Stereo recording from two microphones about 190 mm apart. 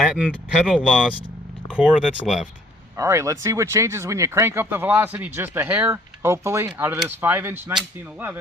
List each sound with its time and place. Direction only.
0.0 s speech: 5° right (ahead or behind)
3.0 s speech: 15° right (ahead or behind)